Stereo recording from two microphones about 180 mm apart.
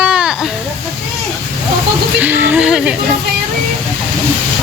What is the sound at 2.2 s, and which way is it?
Speech, 10° right (ahead or behind).